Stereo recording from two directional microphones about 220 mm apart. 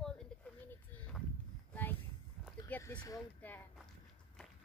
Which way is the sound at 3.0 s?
10° left (ahead or behind).